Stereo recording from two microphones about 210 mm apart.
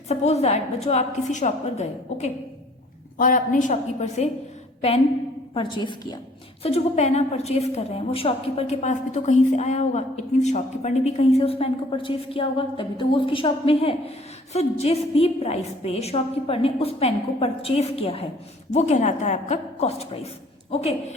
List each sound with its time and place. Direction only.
0.1 s a woman's voice: 30° left (ahead or behind)
5.5 s a woman's voice: 20° left (ahead or behind)
6.6 s a woman's voice: 30° left (ahead or behind)